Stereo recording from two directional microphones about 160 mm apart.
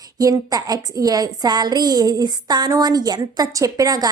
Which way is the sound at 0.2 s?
25° right (ahead or behind).